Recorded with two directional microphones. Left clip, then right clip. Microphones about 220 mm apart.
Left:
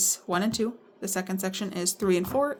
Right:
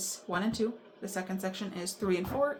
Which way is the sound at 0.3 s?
55° left (ahead or behind).